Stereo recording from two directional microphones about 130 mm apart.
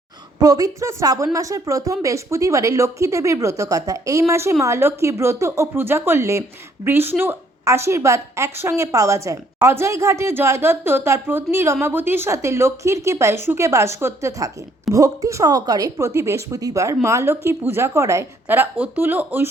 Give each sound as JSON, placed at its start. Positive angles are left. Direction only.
{"t": 0.4, "sound": "a woman's voice", "side_deg": -25}